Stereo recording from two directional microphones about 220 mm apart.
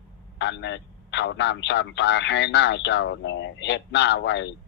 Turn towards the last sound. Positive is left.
turn(degrees=55)  # may be behind; listen again after turning